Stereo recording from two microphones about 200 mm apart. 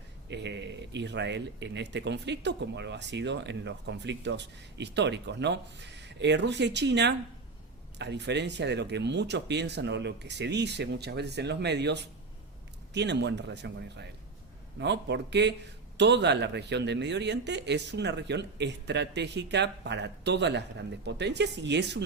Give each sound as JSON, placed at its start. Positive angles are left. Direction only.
{"t": 0.3, "sound": "a man's voice", "side_deg": -60}